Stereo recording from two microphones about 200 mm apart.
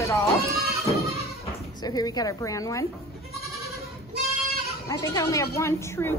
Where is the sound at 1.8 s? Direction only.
20° left (ahead or behind).